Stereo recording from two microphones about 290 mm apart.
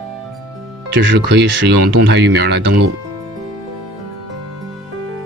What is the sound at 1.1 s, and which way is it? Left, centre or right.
Speech, right.